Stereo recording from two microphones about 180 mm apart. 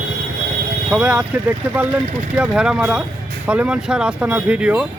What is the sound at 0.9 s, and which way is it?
Speech, 5° right (ahead or behind).